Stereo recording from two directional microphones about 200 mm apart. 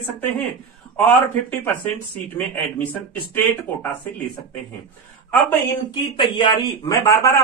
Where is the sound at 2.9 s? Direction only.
10° left (ahead or behind).